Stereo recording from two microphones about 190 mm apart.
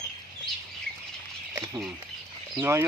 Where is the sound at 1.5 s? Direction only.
15° right (ahead or behind).